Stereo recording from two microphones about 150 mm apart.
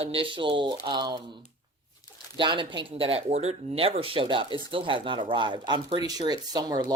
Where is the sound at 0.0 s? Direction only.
40° right (ahead or behind).